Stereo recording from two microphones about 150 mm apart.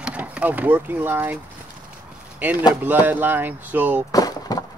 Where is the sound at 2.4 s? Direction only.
10° right (ahead or behind).